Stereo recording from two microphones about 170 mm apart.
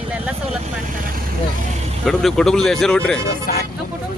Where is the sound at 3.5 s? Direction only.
60° left (ahead or behind).